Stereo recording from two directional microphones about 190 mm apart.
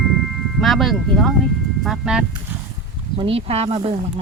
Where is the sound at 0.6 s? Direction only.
Centre (ahead or behind).